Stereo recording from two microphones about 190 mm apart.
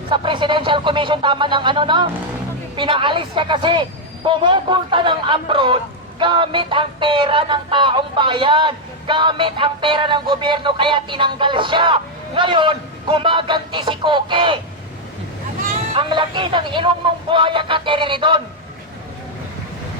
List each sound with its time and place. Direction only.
0.1 s speech: 25° right (ahead or behind)
16.0 s speech: 25° right (ahead or behind)